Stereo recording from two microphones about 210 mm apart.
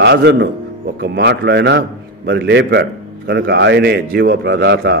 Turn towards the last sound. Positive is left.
turn(degrees=-55)  # may be behind; listen again after turning